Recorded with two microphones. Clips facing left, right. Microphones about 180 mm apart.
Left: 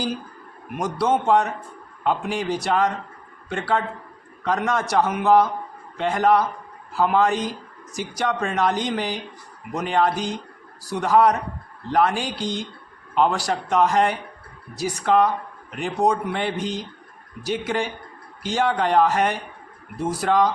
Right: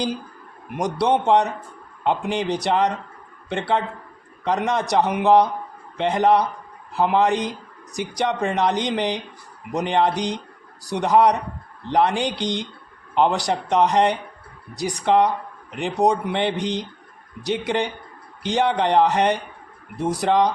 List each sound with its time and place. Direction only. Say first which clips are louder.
0.8 s a man's voice: right 2 dB; 15° right (ahead or behind)
17.7 s speech: right 2 dB; 20° right (ahead or behind)